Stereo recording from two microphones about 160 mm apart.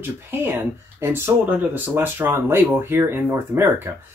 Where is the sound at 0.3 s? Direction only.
15° right (ahead or behind).